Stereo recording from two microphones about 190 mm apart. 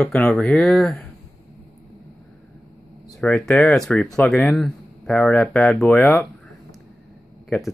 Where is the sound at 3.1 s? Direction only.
Centre (ahead or behind).